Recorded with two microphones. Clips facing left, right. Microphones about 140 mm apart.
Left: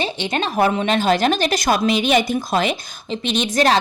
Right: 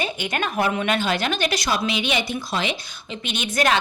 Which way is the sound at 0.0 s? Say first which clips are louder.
Left 3 dB; 30° left (ahead or behind).